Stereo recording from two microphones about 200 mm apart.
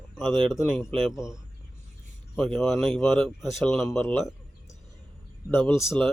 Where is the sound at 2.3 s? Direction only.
5° left (ahead or behind).